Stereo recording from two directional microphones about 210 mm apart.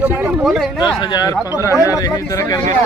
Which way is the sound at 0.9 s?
20° left (ahead or behind).